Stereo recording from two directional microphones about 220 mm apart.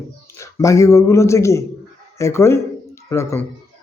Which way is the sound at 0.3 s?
15° left (ahead or behind).